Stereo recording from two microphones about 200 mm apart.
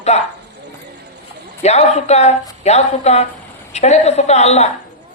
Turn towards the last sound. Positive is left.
turn(degrees=35)  # may be behind; listen again after turning